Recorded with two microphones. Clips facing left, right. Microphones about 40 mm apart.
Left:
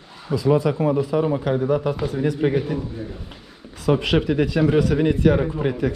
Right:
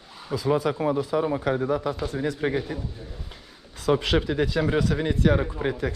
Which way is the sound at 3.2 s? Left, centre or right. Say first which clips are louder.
Left 5 dB; left.